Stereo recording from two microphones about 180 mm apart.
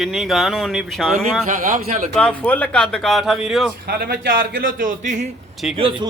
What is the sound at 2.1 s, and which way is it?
Speech, 5° left (ahead or behind).